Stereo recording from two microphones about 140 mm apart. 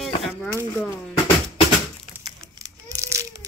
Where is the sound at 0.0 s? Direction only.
Centre (ahead or behind).